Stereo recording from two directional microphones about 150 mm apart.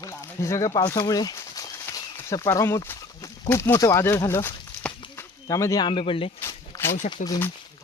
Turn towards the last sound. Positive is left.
turn(degrees=25)  # may be behind; listen again after turning